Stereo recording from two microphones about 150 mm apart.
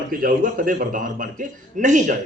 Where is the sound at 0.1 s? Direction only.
70° right (ahead or behind).